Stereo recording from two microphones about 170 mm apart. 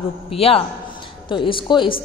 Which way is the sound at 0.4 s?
35° left (ahead or behind).